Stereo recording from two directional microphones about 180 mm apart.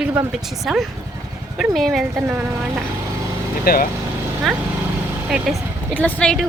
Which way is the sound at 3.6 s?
55° left (ahead or behind).